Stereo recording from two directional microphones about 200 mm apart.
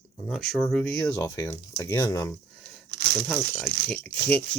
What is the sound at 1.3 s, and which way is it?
Speech, 15° left (ahead or behind).